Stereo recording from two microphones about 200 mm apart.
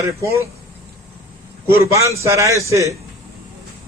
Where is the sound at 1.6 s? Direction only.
15° right (ahead or behind).